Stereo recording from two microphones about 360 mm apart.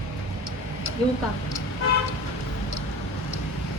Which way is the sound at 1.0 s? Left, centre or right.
Centre.